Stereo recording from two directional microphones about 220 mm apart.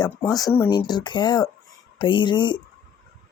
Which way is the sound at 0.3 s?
15° left (ahead or behind).